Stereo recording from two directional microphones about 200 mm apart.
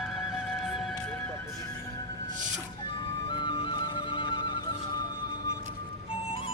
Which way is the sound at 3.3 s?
25° left (ahead or behind).